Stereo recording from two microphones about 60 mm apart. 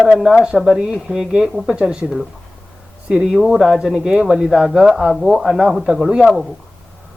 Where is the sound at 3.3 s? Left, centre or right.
Centre.